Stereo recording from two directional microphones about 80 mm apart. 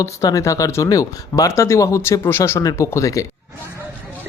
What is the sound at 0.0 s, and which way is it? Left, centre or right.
Speech, left.